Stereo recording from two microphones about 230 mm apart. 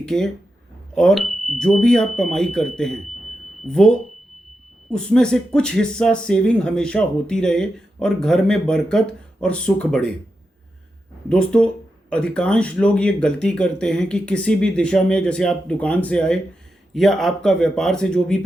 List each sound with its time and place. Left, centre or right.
0.0 s speech: centre
11.3 s speech: centre